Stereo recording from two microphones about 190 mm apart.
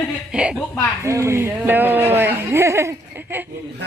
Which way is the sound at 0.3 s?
5° right (ahead or behind).